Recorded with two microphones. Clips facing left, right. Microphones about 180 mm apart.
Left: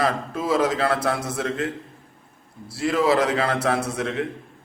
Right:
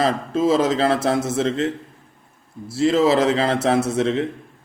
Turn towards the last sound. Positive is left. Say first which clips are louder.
# right 6 dB
turn(degrees=-25)  # may be behind; listen again after turning